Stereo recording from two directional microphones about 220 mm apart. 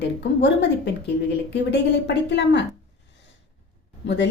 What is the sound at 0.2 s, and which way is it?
Speech, 50° left (ahead or behind).